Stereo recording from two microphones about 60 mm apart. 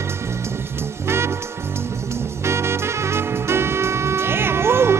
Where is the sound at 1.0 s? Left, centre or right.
Right.